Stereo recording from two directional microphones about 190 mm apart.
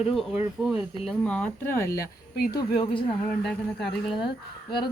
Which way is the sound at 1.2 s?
5° left (ahead or behind).